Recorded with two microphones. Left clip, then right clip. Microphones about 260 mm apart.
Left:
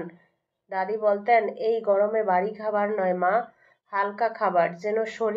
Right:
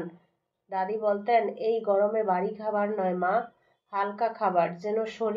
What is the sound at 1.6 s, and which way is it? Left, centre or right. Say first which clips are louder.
A woman's voice: left 2 dB; left.